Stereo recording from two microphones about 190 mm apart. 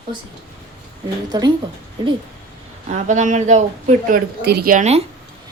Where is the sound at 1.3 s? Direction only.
20° right (ahead or behind).